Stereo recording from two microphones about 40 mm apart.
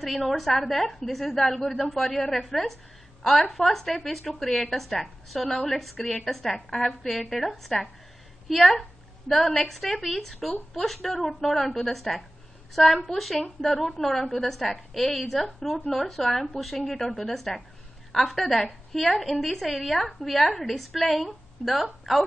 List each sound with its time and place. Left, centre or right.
0.0 s a woman's voice: centre